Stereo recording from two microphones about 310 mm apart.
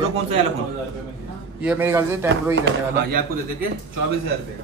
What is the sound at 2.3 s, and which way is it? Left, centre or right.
Speech, right.